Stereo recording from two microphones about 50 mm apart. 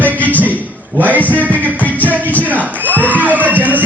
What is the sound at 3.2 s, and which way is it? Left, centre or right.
Speech, right.